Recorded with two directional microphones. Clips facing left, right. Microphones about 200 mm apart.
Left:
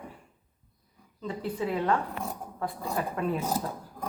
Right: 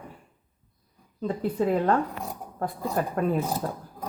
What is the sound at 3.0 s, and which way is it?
Speech, 45° right (ahead or behind).